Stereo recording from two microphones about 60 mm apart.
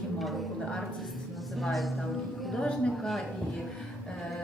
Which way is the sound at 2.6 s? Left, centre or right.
Centre.